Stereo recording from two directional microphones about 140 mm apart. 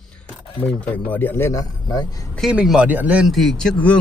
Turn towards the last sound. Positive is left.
turn(degrees=5)  # may be behind; listen again after turning